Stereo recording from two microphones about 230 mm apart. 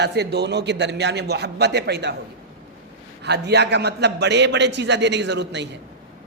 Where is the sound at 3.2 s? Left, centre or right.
Right.